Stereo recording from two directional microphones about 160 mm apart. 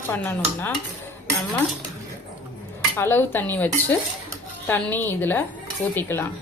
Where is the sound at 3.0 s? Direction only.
15° left (ahead or behind).